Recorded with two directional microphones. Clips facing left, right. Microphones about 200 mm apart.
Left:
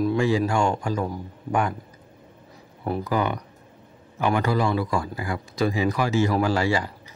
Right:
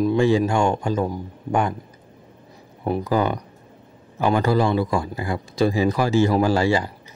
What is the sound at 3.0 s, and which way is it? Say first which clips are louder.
A man's voice: right 3 dB; 30° right (ahead or behind).